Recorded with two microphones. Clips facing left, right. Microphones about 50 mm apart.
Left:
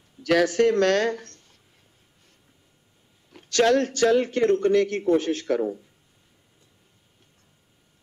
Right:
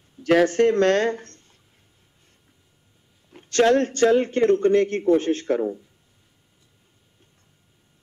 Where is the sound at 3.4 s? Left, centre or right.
Right.